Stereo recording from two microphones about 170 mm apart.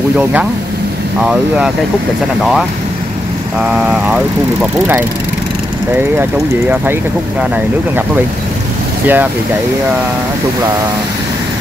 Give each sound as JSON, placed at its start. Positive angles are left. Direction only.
{"t": 3.5, "sound": "speech", "side_deg": -5}
{"t": 9.0, "sound": "speech", "side_deg": -10}